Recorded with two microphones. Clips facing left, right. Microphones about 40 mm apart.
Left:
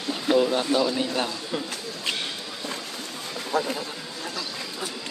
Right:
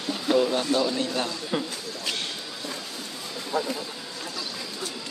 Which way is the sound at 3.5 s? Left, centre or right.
Left.